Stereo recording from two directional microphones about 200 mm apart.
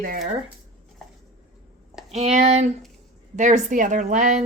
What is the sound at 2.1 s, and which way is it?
A woman's voice, 30° right (ahead or behind).